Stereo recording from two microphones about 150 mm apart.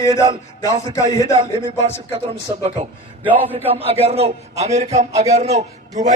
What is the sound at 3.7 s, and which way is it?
A man's voice, 40° right (ahead or behind).